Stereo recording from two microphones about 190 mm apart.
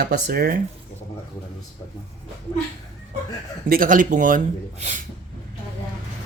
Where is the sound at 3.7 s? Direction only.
45° right (ahead or behind).